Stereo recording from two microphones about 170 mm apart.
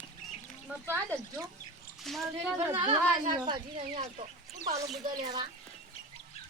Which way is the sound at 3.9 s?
45° right (ahead or behind).